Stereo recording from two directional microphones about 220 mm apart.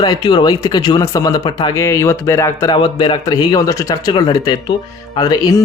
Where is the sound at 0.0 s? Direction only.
20° left (ahead or behind).